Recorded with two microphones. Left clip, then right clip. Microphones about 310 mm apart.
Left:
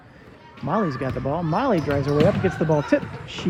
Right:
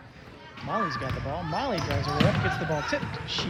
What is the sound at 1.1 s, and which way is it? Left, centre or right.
Speech, centre.